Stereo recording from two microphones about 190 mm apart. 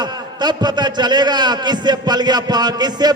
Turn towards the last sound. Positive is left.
turn(degrees=-20)  # may be behind; listen again after turning